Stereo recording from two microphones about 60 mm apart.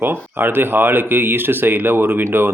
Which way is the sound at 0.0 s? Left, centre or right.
Right.